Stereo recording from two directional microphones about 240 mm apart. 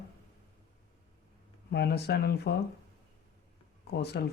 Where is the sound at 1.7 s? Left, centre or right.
Left.